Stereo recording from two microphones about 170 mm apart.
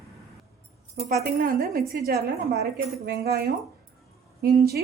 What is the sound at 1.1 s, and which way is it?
A woman's voice, 60° right (ahead or behind).